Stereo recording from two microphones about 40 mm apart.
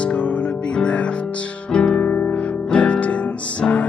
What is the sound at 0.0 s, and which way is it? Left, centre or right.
Music, left.